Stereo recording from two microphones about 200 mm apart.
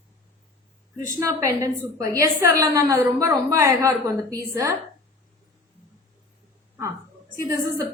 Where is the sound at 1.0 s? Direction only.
15° right (ahead or behind).